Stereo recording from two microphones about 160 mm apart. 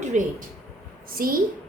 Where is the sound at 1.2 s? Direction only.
65° right (ahead or behind).